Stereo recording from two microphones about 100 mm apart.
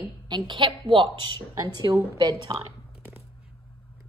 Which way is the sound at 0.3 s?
50° right (ahead or behind).